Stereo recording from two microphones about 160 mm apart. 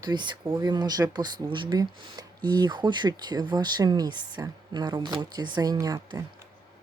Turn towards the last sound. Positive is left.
turn(degrees=-25)  # may be behind; listen again after turning